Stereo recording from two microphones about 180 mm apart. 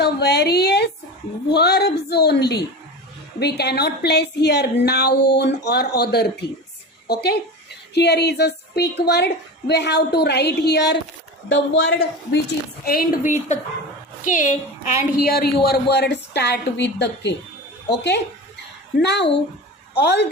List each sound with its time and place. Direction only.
0.0 s a sound: 65° left (ahead or behind)
1.5 s a woman's voice: 65° left (ahead or behind)
11.4 s a woman's voice: 90° left
12.8 s a woman's voice: 55° left (ahead or behind)
15.3 s speech: 60° left (ahead or behind)
19.0 s a woman's voice: 70° left (ahead or behind)